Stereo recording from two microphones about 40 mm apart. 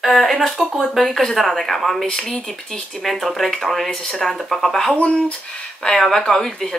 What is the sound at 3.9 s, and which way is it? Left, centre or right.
Speech, left.